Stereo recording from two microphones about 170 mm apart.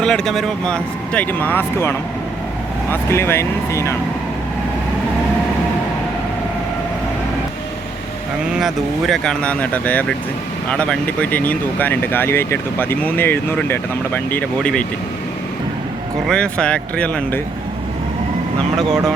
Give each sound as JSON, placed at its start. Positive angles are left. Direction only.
{"t": 0.0, "sound": "speech", "side_deg": 5}
{"t": 8.5, "sound": "speech", "side_deg": 0}
{"t": 16.2, "sound": "speech", "side_deg": 5}